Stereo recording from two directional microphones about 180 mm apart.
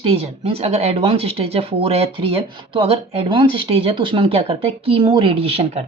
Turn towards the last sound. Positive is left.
turn(degrees=-35)  # may be behind; listen again after turning